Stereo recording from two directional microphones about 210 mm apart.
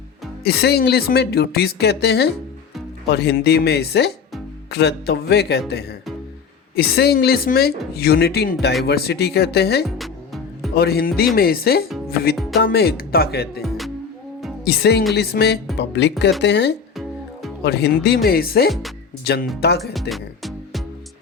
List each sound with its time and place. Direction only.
0.4 s a woman's voice: 50° left (ahead or behind)
10.0 s music: centre (ahead or behind)
10.8 s a woman's voice: 50° left (ahead or behind)
13.6 s music: centre (ahead or behind)
14.6 s a woman's voice: 50° left (ahead or behind)
19.8 s music: centre (ahead or behind)